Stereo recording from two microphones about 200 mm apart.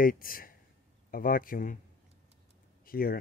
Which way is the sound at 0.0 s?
45° left (ahead or behind).